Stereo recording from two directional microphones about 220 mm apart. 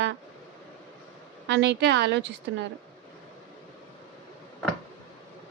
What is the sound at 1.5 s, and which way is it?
A woman's voice, 55° right (ahead or behind).